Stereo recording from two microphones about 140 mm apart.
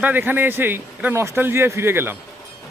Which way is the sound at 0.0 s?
15° right (ahead or behind).